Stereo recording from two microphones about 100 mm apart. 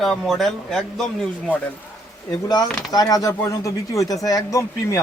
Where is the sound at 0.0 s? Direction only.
5° left (ahead or behind).